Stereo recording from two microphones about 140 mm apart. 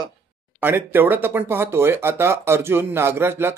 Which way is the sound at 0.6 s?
15° right (ahead or behind).